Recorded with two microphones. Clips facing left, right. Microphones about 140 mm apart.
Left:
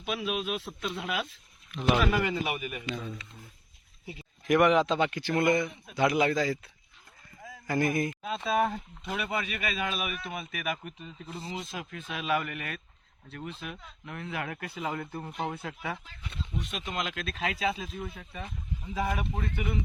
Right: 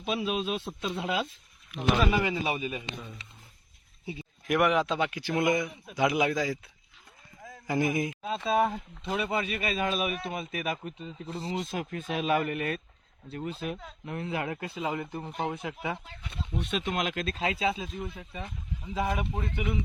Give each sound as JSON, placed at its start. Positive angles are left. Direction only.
{"t": 0.0, "sound": "speech", "side_deg": -30}
{"t": 1.7, "sound": "a man's voice", "side_deg": -10}
{"t": 2.4, "sound": "speech", "side_deg": -25}
{"t": 4.4, "sound": "a man's voice", "side_deg": -5}
{"t": 7.7, "sound": "a man's voice", "side_deg": -10}
{"t": 9.0, "sound": "a man's voice", "side_deg": -25}
{"t": 11.5, "sound": "a man's voice", "side_deg": -50}
{"t": 16.9, "sound": "a man's voice", "side_deg": -40}
{"t": 17.4, "sound": "a man's voice", "side_deg": -25}